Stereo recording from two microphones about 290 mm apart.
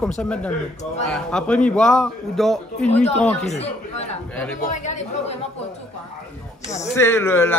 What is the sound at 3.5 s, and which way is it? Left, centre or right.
Speech, left.